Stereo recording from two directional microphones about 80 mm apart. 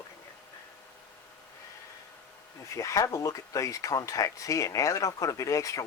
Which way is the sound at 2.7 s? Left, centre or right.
Left.